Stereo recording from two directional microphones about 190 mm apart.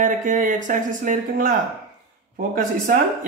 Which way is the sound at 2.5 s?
45° right (ahead or behind).